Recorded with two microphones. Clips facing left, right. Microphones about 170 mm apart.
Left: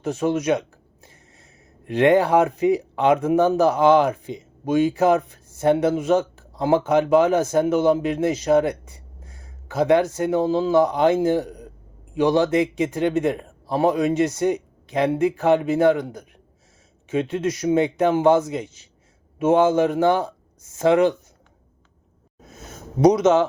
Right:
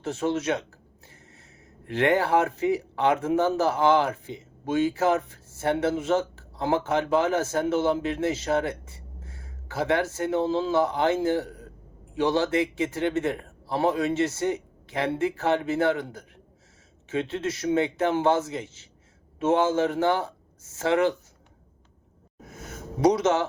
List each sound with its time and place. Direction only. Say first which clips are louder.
0.1 s speech: left 5 dB; 15° left (ahead or behind)
1.8 s speech: left 6 dB; 20° left (ahead or behind)
17.1 s speech: left 5 dB; 15° left (ahead or behind)
22.4 s a sound: right 1 dB; 20° left (ahead or behind)